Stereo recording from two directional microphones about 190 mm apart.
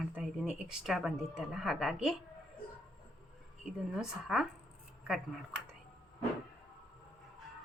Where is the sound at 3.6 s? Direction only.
5° right (ahead or behind).